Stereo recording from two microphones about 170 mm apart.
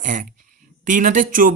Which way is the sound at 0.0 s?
50° right (ahead or behind).